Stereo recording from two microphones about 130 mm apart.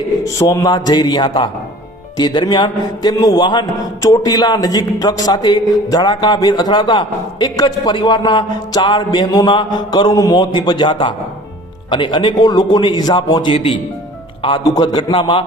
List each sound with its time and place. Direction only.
0.3 s a man's voice: 25° left (ahead or behind)